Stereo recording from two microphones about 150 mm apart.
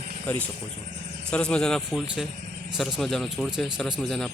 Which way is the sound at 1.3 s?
5° left (ahead or behind).